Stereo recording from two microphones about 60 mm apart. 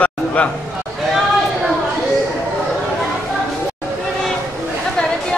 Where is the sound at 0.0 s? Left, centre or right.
Left.